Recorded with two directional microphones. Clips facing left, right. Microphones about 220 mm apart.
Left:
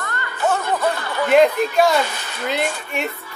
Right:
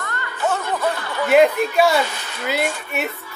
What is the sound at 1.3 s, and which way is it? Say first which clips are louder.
A woman's voice: even; 5° right (ahead or behind).